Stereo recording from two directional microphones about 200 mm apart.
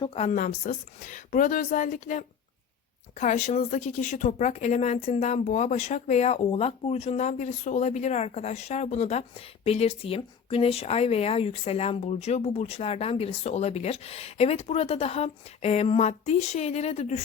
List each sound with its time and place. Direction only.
0.0 s speech: 30° left (ahead or behind)